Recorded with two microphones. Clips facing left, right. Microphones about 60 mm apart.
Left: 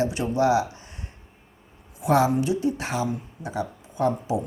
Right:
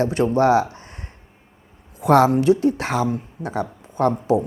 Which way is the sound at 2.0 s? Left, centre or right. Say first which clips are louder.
Right 6 dB; right.